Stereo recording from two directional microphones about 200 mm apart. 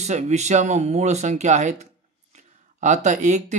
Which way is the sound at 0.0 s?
35° right (ahead or behind).